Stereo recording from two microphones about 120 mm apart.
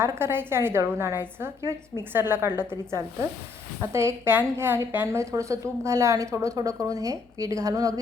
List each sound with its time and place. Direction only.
0.0 s a woman's voice: 20° right (ahead or behind)